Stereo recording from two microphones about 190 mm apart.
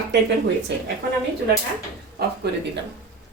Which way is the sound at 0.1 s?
65° right (ahead or behind).